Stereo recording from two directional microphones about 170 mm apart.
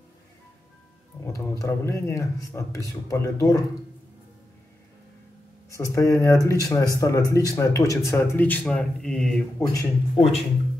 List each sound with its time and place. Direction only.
1.2 s speech: 20° left (ahead or behind)
5.7 s speech: 20° left (ahead or behind)
9.6 s speech: 20° left (ahead or behind)